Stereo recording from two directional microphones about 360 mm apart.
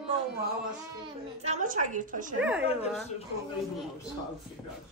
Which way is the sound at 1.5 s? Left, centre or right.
Centre.